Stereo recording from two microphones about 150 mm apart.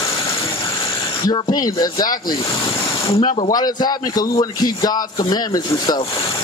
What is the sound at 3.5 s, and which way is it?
Speech, 25° left (ahead or behind).